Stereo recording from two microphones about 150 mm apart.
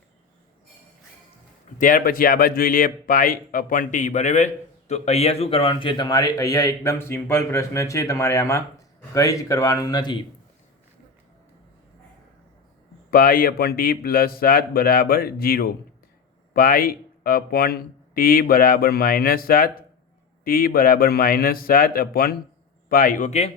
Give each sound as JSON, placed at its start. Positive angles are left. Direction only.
{"t": 1.8, "sound": "speech", "side_deg": 65}
{"t": 13.1, "sound": "a man's voice", "side_deg": 75}
{"t": 16.6, "sound": "speech", "side_deg": 70}
{"t": 22.9, "sound": "a man's voice", "side_deg": 65}